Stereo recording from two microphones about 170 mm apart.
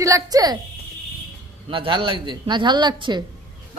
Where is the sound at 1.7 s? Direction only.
30° right (ahead or behind).